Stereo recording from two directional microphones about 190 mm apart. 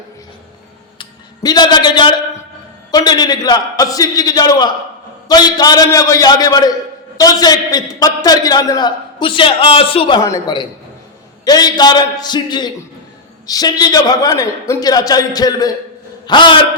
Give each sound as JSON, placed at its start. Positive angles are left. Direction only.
{"t": 0.9, "sound": "a man's voice", "side_deg": 20}